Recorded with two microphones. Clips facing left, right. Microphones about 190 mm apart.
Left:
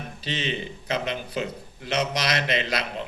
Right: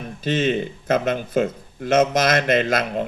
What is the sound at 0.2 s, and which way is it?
A man's voice, 50° right (ahead or behind).